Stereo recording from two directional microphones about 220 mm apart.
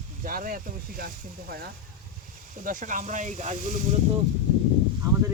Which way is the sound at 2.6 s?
35° right (ahead or behind).